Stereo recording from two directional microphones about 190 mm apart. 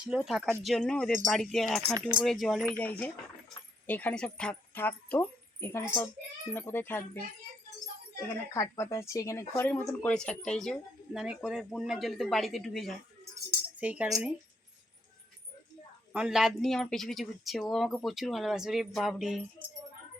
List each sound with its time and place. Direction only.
0.1 s speech: centre (ahead or behind)
8.5 s speech: 15° left (ahead or behind); by 14.3 s 5° right (ahead or behind)
16.1 s speech: 5° right (ahead or behind)